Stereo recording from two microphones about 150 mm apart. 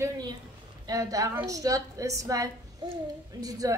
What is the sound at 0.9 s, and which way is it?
A woman's voice, 25° right (ahead or behind).